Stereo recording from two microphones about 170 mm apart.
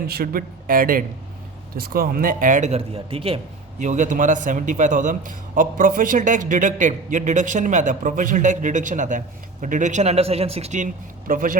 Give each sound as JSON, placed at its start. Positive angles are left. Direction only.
{"t": 0.1, "sound": "a man's voice", "side_deg": -60}
{"t": 3.8, "sound": "a man's voice", "side_deg": -45}
{"t": 11.3, "sound": "speech", "side_deg": -55}